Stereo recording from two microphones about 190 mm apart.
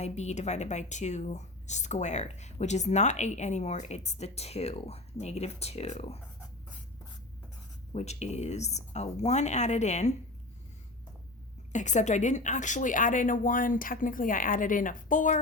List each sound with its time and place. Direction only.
0.0 s a woman's voice: 35° left (ahead or behind)
7.9 s a woman's voice: 35° left (ahead or behind)
11.7 s a woman's voice: 40° left (ahead or behind)